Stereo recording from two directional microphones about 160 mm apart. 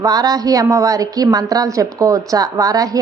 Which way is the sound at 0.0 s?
25° right (ahead or behind).